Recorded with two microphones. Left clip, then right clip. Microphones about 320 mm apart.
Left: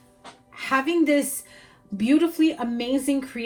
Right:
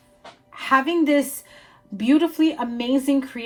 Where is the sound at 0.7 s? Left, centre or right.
Right.